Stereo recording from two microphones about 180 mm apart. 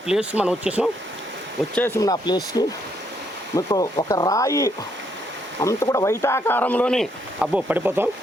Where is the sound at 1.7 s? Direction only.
15° left (ahead or behind); by 8.1 s 10° right (ahead or behind).